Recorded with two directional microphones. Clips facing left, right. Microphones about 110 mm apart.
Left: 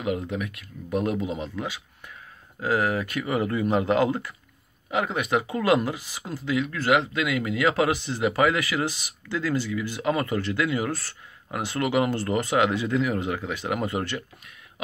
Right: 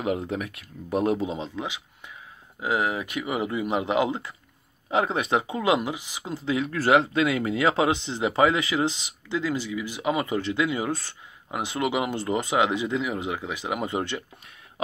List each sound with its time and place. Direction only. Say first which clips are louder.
0.0 s speech: right 1 dB; 35° right (ahead or behind); by 4.3 s 15° right (ahead or behind)
4.9 s speech: right 1 dB; 30° right (ahead or behind)